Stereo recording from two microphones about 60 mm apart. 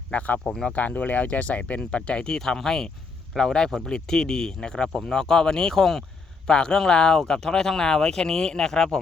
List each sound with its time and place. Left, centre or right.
0.1 s speech: left